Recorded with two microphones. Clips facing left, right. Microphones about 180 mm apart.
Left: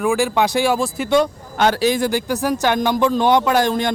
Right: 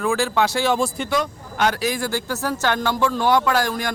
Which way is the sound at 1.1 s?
30° left (ahead or behind).